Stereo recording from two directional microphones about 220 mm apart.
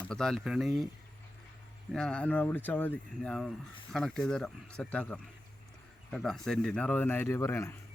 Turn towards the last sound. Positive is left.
turn(degrees=10)  # may be behind; listen again after turning